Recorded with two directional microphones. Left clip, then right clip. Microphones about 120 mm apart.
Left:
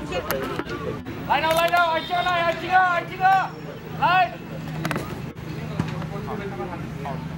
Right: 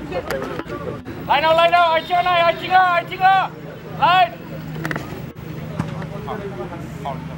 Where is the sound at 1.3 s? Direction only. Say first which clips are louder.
Right 6 dB; 45° right (ahead or behind).